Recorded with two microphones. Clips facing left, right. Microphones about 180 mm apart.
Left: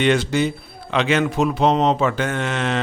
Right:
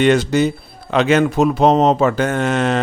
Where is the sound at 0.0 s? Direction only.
40° right (ahead or behind).